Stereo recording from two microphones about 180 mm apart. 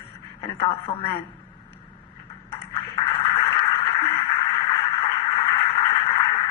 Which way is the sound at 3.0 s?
30° left (ahead or behind).